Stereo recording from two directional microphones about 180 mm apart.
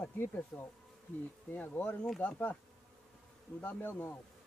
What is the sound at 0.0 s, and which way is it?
Speech, 10° left (ahead or behind).